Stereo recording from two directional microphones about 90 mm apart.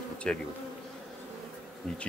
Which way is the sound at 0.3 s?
10° left (ahead or behind).